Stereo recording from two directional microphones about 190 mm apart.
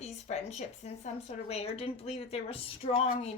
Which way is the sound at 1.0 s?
35° left (ahead or behind).